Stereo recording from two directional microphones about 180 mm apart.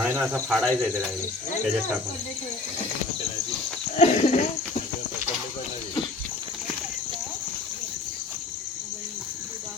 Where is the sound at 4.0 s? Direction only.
40° left (ahead or behind).